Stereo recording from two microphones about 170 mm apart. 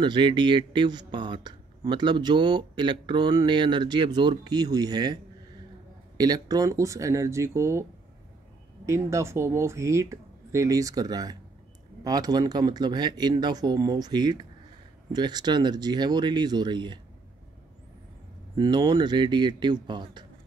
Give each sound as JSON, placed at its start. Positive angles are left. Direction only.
{"t": 0.0, "sound": "speech", "side_deg": -25}
{"t": 8.8, "sound": "speech", "side_deg": -15}
{"t": 18.6, "sound": "speech", "side_deg": -25}